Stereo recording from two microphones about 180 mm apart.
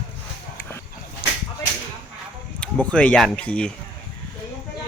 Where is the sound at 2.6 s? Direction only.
5° left (ahead or behind).